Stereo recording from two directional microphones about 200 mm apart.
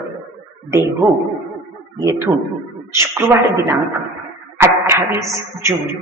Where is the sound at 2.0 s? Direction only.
15° right (ahead or behind).